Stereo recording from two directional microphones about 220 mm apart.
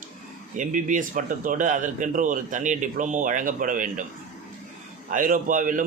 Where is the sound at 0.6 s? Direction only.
35° right (ahead or behind).